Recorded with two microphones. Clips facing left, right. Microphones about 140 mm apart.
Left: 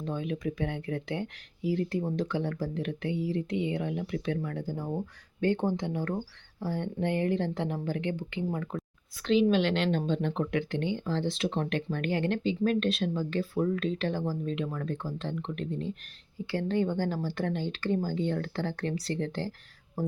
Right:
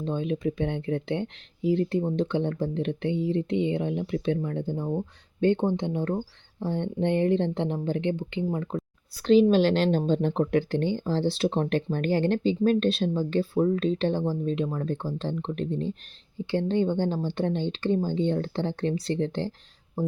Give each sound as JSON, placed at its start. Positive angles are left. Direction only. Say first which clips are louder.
{"t": 0.0, "sound": "speech", "louder": "right 5 dB", "side_deg": -25}
{"t": 9.2, "sound": "speech", "louder": "right 5 dB", "side_deg": -35}